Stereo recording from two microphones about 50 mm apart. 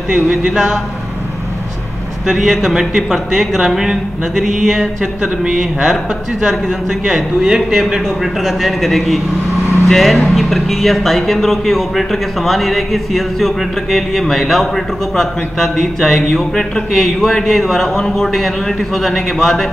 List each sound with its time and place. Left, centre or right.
0.1 s speech: centre
2.2 s speech: centre